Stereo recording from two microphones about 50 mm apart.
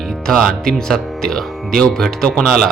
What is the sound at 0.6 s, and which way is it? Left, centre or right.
Speech, centre.